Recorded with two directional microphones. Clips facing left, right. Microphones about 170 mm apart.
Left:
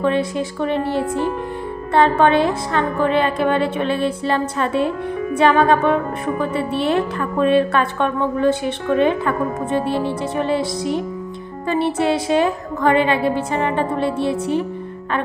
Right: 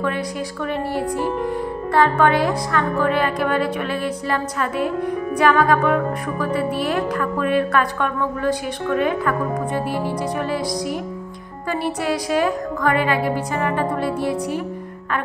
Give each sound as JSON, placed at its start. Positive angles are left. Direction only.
{"t": 0.0, "sound": "speech", "side_deg": 25}